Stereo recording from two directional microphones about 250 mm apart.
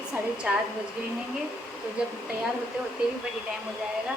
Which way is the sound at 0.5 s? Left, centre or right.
Centre.